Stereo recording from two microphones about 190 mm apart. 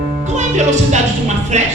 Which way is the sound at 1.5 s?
35° right (ahead or behind).